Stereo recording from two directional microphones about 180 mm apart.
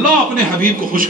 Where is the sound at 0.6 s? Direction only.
50° right (ahead or behind).